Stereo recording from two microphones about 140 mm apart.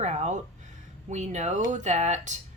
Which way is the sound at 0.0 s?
55° right (ahead or behind).